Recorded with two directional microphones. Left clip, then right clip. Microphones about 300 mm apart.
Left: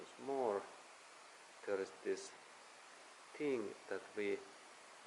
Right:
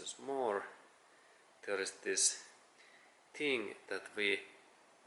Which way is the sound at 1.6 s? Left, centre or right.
Centre.